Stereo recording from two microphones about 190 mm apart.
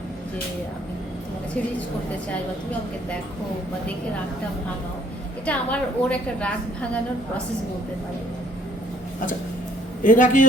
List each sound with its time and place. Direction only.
5.5 s a woman's voice: 5° left (ahead or behind)
10.0 s a man's voice: 45° left (ahead or behind)